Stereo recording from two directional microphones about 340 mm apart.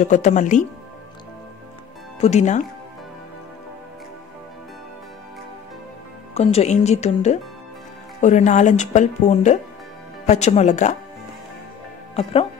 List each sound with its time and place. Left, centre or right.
0.0 s speech: left
2.1 s speech: centre
6.3 s speech: centre
12.2 s speech: centre